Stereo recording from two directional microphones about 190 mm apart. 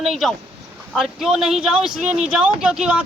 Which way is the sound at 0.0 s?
Centre (ahead or behind).